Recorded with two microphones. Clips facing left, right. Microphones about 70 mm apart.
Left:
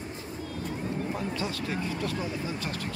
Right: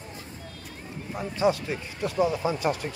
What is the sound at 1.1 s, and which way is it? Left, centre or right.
Speech, centre.